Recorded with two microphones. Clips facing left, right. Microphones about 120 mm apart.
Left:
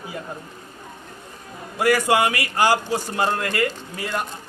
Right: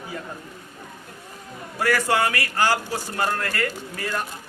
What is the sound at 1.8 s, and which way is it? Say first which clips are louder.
A man's voice: left 3 dB; 15° left (ahead or behind).